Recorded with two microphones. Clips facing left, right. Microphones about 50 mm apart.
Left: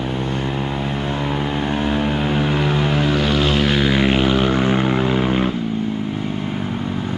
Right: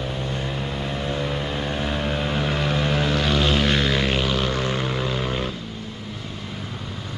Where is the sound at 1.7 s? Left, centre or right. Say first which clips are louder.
Left 6 dB; centre.